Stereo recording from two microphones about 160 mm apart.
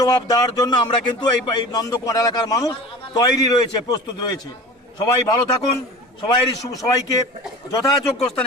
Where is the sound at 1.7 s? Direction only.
20° left (ahead or behind).